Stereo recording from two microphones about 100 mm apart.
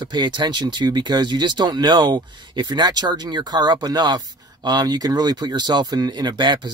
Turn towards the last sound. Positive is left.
turn(degrees=-50)  # may be behind; listen again after turning